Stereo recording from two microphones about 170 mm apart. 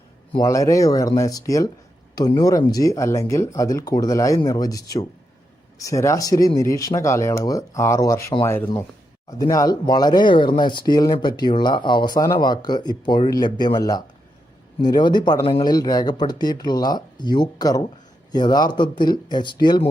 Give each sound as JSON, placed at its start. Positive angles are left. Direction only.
{"t": 0.3, "sound": "speech", "side_deg": 20}
{"t": 9.4, "sound": "speech", "side_deg": 20}